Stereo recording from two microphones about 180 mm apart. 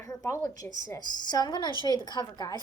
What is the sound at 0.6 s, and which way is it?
Speech, 45° right (ahead or behind).